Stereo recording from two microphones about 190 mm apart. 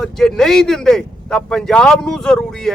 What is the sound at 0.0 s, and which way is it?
Speech, centre (ahead or behind).